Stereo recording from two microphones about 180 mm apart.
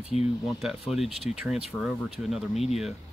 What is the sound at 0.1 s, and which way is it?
Speech, 35° left (ahead or behind).